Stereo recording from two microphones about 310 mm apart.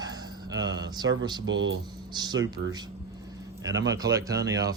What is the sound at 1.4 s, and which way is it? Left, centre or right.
Speech, right.